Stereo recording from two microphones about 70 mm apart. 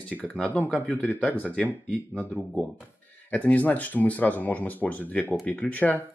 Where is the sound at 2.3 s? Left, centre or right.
Centre.